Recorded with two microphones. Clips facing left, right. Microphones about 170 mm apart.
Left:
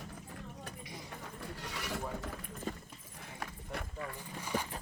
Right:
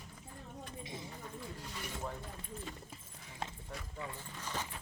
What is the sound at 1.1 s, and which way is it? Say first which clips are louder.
Horse: left 1 dB; 70° left (ahead or behind).